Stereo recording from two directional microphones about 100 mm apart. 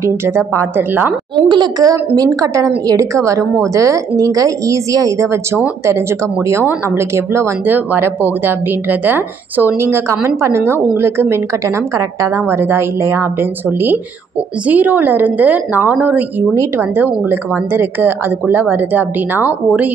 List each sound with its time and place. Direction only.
0.0 s speech: 25° right (ahead or behind)
1.5 s a woman's voice: 45° right (ahead or behind); by 19.9 s 20° right (ahead or behind)